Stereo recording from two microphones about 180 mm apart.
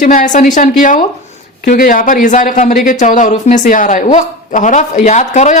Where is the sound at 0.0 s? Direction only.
45° left (ahead or behind).